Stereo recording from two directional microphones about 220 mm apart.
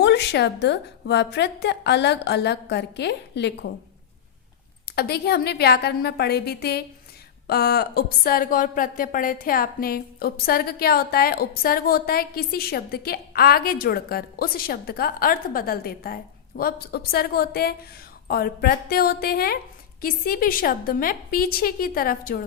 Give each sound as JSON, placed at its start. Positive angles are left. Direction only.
{"t": 0.0, "sound": "speech", "side_deg": 50}
{"t": 4.9, "sound": "a woman's voice", "side_deg": 45}